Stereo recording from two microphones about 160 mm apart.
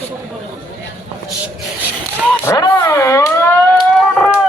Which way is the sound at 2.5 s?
20° left (ahead or behind).